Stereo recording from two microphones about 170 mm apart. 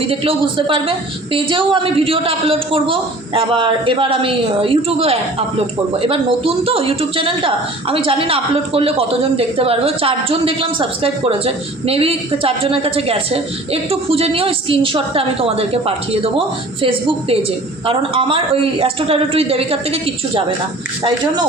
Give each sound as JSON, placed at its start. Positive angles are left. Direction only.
{"t": 0.1, "sound": "speech", "side_deg": -30}